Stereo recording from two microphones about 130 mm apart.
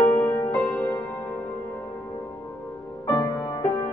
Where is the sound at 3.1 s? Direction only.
25° left (ahead or behind).